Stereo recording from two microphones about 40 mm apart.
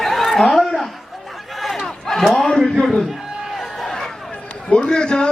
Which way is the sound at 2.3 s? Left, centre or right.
Centre.